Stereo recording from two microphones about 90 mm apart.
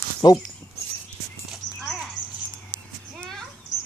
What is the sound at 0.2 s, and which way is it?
Speech, 60° left (ahead or behind).